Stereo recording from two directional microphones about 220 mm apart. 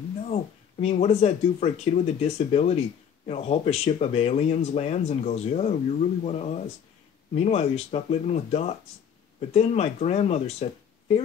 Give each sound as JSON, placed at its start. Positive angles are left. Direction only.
{"t": 0.3, "sound": "speech", "side_deg": 30}